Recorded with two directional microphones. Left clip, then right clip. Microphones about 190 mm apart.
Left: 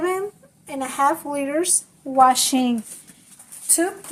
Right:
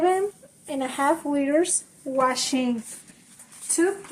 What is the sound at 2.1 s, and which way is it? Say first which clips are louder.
Speech: left 8 dB; 35° left (ahead or behind).